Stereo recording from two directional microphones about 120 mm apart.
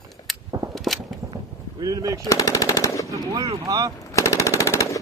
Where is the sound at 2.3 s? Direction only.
30° left (ahead or behind).